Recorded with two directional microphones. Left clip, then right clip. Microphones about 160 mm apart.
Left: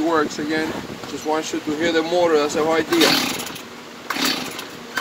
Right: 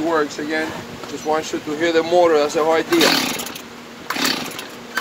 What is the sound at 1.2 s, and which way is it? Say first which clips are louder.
Speech: right 2 dB; 40° right (ahead or behind).